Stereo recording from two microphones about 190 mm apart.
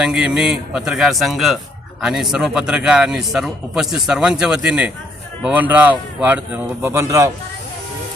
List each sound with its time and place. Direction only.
0.0 s a man's voice: 5° right (ahead or behind)